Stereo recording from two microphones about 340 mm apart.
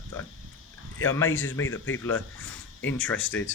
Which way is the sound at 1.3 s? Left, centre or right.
Left.